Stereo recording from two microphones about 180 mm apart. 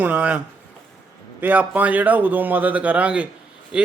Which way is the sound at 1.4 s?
10° right (ahead or behind).